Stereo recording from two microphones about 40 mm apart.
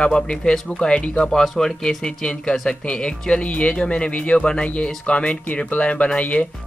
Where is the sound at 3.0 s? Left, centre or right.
Left.